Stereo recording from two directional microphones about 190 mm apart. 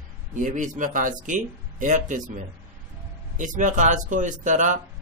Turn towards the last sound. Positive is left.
turn(degrees=-40)  # may be behind; listen again after turning